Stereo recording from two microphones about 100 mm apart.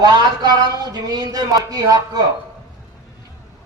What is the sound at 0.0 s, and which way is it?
A man's voice, 45° right (ahead or behind).